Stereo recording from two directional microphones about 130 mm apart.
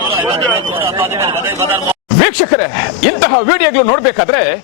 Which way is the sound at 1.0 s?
20° right (ahead or behind).